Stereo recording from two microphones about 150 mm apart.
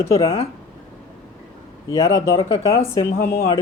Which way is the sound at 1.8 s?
20° left (ahead or behind).